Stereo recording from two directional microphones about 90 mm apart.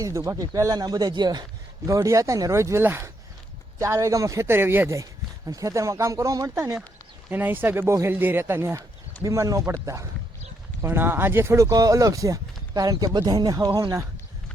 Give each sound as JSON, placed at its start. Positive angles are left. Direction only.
{"t": 0.0, "sound": "speech", "side_deg": -35}
{"t": 1.9, "sound": "speech", "side_deg": -35}
{"t": 5.5, "sound": "speech", "side_deg": -40}
{"t": 7.3, "sound": "speech", "side_deg": -20}
{"t": 10.8, "sound": "speech", "side_deg": -25}